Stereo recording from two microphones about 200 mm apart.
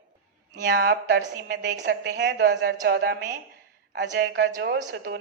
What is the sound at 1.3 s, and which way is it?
A woman's voice, 60° right (ahead or behind).